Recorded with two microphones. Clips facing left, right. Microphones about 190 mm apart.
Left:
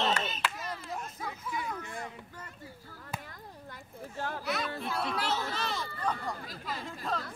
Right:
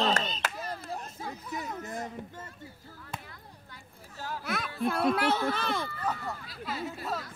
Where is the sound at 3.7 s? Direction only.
60° left (ahead or behind).